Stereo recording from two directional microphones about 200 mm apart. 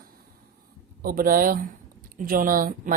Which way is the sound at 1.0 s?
45° right (ahead or behind).